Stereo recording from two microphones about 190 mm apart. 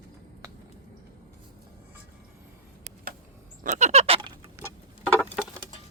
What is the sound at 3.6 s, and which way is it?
Goat, 35° right (ahead or behind).